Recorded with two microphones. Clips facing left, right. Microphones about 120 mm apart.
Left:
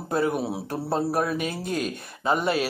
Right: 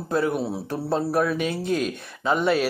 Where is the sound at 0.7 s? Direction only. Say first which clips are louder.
Right 2 dB; 40° left (ahead or behind).